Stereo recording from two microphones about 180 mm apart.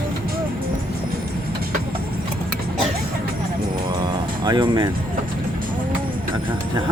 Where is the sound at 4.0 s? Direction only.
25° right (ahead or behind).